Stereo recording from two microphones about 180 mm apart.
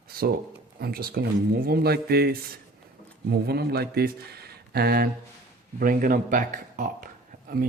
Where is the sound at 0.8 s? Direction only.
55° right (ahead or behind).